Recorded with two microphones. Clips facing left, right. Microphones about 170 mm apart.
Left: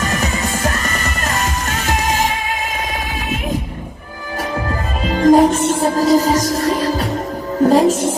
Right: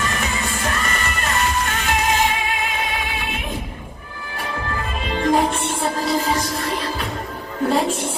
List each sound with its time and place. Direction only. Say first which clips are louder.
0.0 s music: left 5 dB; 40° left (ahead or behind)
5.0 s music: left 8 dB; 40° left (ahead or behind)